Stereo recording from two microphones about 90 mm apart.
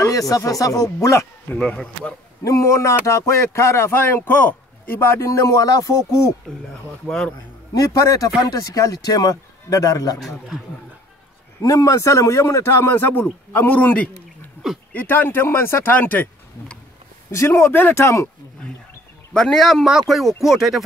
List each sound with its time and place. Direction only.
0.0 s a man's voice: 40° left (ahead or behind)
0.9 s a man's voice: 30° left (ahead or behind)
1.6 s a man's voice: 10° left (ahead or behind)
2.4 s a man's voice: 35° left (ahead or behind)
7.7 s a man's voice: 40° left (ahead or behind)
11.6 s a man's voice: 40° left (ahead or behind); by 16.7 s 20° left (ahead or behind)
17.3 s a man's voice: 35° left (ahead or behind)
19.3 s speech: 5° left (ahead or behind)